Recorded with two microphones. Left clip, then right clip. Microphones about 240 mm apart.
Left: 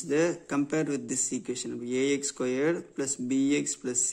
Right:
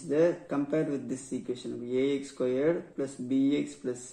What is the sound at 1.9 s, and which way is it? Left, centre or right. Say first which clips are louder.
Speech: left 1 dB; left.